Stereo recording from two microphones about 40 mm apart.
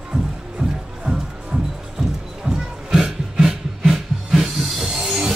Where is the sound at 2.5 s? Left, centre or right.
Centre.